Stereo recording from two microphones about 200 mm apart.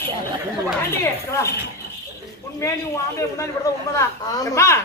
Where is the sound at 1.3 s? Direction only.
15° left (ahead or behind).